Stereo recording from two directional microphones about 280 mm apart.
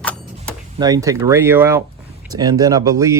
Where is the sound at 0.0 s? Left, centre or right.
Centre.